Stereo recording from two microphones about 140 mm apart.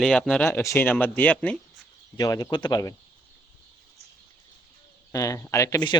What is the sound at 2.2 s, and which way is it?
Speech, 25° left (ahead or behind).